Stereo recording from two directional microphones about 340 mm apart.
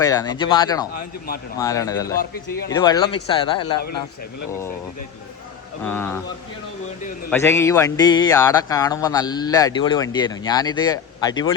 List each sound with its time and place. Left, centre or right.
0.0 s speech: centre
5.8 s speech: centre
7.3 s speech: centre